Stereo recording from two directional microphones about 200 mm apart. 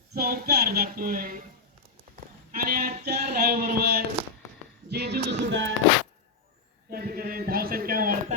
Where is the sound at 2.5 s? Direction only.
45° right (ahead or behind); by 5.7 s 65° right (ahead or behind).